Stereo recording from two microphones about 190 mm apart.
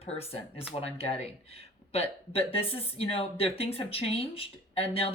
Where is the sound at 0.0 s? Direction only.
30° left (ahead or behind).